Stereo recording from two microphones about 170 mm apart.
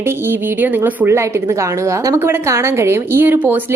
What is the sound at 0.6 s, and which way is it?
A woman's voice, 15° right (ahead or behind).